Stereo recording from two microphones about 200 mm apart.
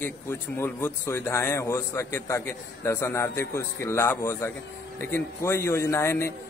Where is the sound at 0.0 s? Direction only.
10° left (ahead or behind).